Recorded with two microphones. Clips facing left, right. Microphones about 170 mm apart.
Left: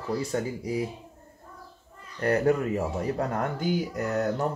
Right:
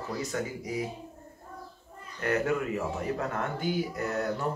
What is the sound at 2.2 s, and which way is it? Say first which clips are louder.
Speech: left 5 dB; 35° left (ahead or behind).